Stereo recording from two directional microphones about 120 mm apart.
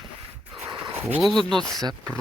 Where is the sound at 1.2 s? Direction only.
Centre (ahead or behind).